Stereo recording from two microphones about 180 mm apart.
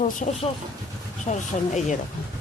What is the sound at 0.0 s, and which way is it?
Speech, 45° left (ahead or behind).